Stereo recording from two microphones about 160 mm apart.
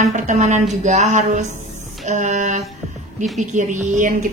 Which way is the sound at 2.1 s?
50° right (ahead or behind).